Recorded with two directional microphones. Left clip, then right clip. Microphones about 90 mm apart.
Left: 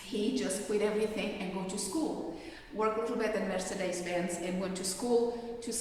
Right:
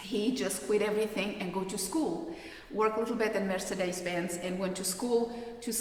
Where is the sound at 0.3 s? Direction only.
60° right (ahead or behind).